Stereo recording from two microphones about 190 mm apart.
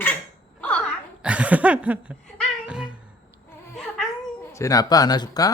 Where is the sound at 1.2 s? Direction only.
5° right (ahead or behind).